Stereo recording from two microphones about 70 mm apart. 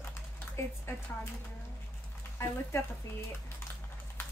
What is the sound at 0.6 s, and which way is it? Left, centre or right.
Speech, left.